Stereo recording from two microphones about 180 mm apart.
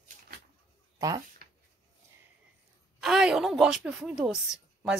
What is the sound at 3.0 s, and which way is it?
A woman's voice, 5° right (ahead or behind).